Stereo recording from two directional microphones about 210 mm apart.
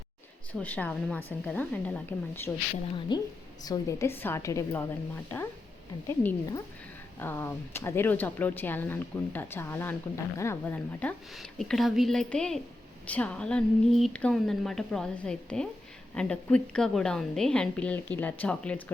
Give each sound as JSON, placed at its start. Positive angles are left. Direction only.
{"t": 0.5, "sound": "speech", "side_deg": 5}
{"t": 3.1, "sound": "a woman's voice", "side_deg": 20}